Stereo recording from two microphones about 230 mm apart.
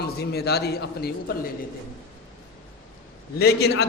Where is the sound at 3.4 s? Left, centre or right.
Left.